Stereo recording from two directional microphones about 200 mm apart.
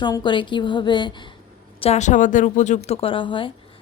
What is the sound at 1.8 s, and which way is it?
A woman's voice, 35° left (ahead or behind).